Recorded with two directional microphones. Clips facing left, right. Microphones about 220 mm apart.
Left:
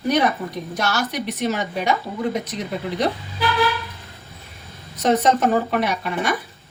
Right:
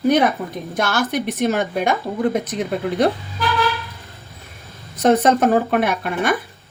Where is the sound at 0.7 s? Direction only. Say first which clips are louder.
Right 4 dB; 50° right (ahead or behind).